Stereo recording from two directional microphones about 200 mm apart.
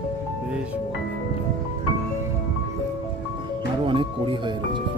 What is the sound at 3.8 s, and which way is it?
Speech, 25° right (ahead or behind).